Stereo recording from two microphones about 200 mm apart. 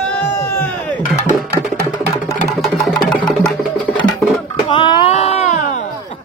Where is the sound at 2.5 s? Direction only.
Centre (ahead or behind).